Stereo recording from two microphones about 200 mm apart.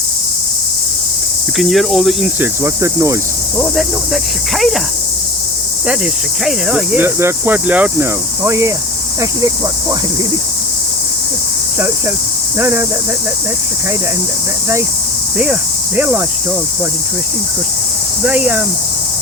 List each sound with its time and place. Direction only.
1.5 s cricket: centre (ahead or behind)
3.6 s cricket: centre (ahead or behind)
6.4 s speech: 5° right (ahead or behind)
12.5 s speech: 10° right (ahead or behind)
18.3 s speech: 10° right (ahead or behind)